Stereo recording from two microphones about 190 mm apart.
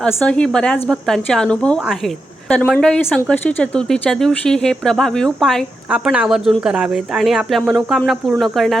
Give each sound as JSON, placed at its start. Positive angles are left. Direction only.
{"t": 0.0, "sound": "speech", "side_deg": 5}